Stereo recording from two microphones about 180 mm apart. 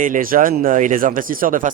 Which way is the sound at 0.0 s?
50° right (ahead or behind).